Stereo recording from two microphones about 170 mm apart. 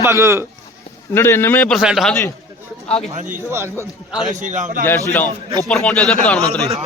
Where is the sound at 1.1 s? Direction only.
15° left (ahead or behind).